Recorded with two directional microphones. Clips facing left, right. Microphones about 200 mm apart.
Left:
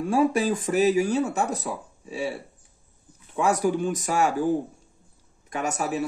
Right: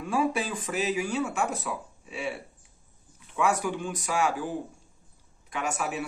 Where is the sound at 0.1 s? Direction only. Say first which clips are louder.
Left 5 dB; 40° left (ahead or behind).